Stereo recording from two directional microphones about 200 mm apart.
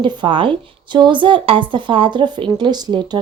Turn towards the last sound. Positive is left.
turn(degrees=-20)  # may be behind; listen again after turning